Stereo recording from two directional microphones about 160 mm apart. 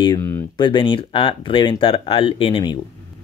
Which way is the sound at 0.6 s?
30° left (ahead or behind).